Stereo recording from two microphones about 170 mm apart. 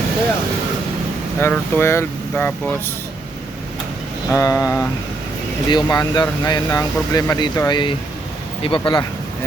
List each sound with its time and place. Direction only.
1.4 s speech: 15° left (ahead or behind)
4.3 s speech: 15° left (ahead or behind)